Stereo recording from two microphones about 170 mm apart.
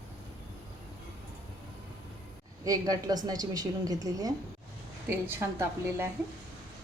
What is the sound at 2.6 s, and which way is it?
A woman's voice, 20° right (ahead or behind).